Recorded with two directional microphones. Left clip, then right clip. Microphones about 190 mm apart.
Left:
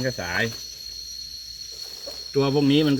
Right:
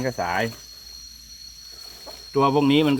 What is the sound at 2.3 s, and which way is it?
Speech, 25° left (ahead or behind).